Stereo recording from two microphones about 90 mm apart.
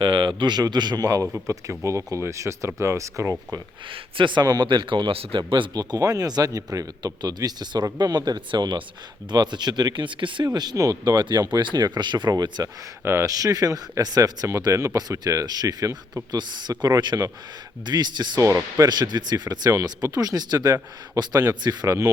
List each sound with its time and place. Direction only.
0.0 s speech: 65° right (ahead or behind); by 3.3 s 35° right (ahead or behind)
3.9 s speech: 65° right (ahead or behind)
5.8 s speech: 40° right (ahead or behind); by 10.4 s 65° right (ahead or behind)
10.4 s speech: 50° right (ahead or behind)
13.1 s speech: 35° right (ahead or behind)
16.3 s speech: 55° right (ahead or behind)
18.3 s speech: 35° right (ahead or behind)
18.9 s speech: 50° right (ahead or behind)